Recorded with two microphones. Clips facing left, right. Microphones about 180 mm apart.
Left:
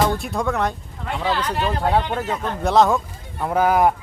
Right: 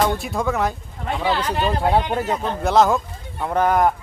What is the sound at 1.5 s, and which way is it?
Speech, 15° right (ahead or behind).